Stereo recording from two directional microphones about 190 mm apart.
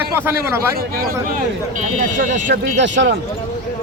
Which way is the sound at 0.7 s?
50° right (ahead or behind).